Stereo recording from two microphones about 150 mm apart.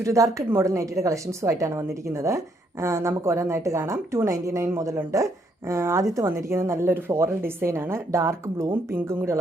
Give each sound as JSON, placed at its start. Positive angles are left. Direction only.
{"t": 0.0, "sound": "a woman's voice", "side_deg": -20}